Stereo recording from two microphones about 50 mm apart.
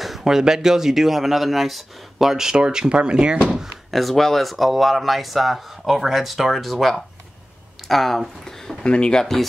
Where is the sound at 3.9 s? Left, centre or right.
Centre.